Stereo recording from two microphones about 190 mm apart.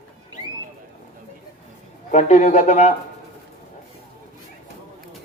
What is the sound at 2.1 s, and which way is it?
Speech, 40° left (ahead or behind).